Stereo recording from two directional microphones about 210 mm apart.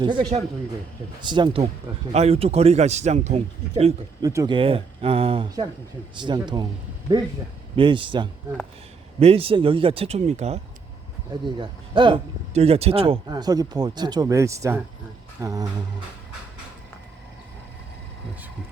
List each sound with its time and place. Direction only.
0.0 s a man's voice: 20° right (ahead or behind)
4.2 s speech: 15° right (ahead or behind)
7.8 s speech: 25° right (ahead or behind)
15.4 s a sound: 15° right (ahead or behind)